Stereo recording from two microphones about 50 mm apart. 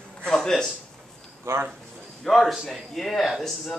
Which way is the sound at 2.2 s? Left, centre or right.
Centre.